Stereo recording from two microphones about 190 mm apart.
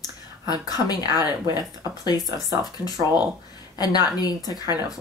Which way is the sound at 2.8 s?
10° right (ahead or behind).